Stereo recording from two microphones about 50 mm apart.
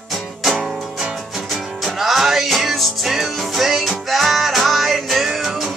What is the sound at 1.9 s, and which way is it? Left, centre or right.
Music, centre.